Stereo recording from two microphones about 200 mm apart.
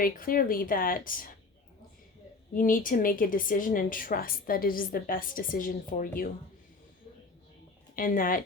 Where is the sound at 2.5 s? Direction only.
45° left (ahead or behind).